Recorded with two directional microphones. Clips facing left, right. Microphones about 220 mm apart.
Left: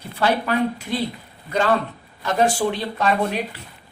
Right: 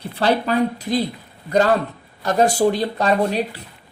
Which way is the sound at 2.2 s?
40° right (ahead or behind).